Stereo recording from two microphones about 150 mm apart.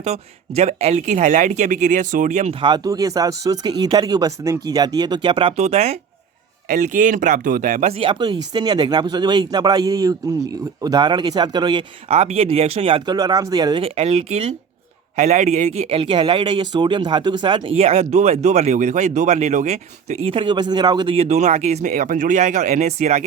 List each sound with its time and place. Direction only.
0.0 s speech: 45° right (ahead or behind)
2.6 s speech: 30° right (ahead or behind); by 6.0 s 45° right (ahead or behind)
6.7 s speech: 60° right (ahead or behind); by 11.8 s 30° right (ahead or behind)
12.0 s speech: 45° right (ahead or behind)
13.1 s speech: 25° right (ahead or behind)
13.8 s speech: 40° right (ahead or behind)